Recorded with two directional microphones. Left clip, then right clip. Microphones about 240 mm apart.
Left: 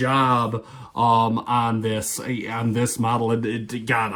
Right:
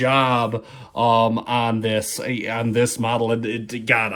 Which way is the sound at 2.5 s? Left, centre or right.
Right.